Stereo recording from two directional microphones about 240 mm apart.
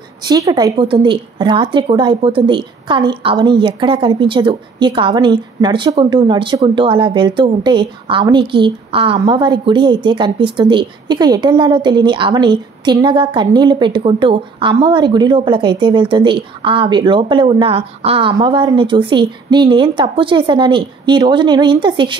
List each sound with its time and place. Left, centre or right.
0.3 s a woman's voice: centre